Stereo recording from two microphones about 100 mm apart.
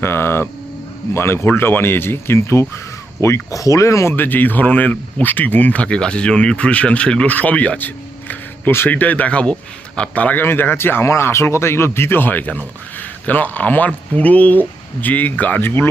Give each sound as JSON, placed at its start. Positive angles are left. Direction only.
{"t": 0.0, "sound": "speech", "side_deg": 25}
{"t": 4.1, "sound": "speech", "side_deg": 20}